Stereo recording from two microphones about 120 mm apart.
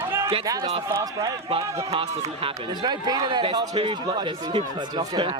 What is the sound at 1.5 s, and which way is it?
Speech, 50° right (ahead or behind).